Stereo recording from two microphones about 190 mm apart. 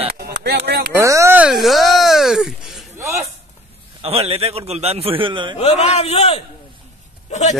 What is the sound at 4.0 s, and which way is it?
A man's voice, 30° right (ahead or behind).